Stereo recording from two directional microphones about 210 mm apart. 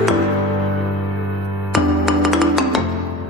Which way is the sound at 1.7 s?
Centre (ahead or behind).